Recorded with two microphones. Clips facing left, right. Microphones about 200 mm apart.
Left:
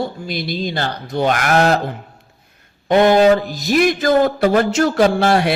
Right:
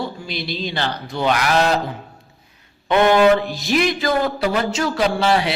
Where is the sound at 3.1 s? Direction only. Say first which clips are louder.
Left 2 dB; 40° left (ahead or behind).